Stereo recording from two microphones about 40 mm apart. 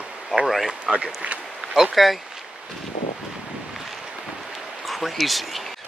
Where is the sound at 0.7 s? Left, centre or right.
Right.